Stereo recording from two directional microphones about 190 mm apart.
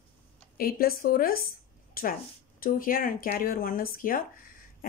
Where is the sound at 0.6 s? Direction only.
50° left (ahead or behind).